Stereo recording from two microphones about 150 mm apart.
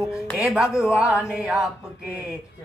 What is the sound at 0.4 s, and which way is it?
Mantra, 5° right (ahead or behind).